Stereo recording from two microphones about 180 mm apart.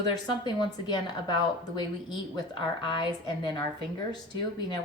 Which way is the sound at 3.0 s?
25° left (ahead or behind).